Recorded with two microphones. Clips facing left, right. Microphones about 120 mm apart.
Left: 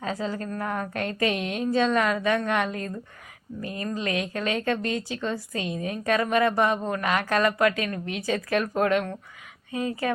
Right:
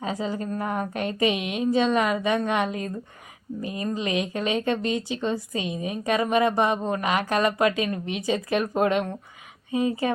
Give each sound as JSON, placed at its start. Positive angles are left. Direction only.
{"t": 0.0, "sound": "a woman's voice", "side_deg": -15}